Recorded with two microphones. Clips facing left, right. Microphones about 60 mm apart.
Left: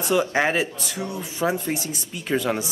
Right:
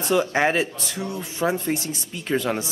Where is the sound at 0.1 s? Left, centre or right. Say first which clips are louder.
Right 1 dB; centre.